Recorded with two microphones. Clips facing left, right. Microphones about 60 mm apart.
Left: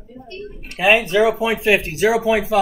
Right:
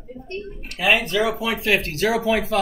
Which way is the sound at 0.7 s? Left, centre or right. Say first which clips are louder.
Left 4 dB; left.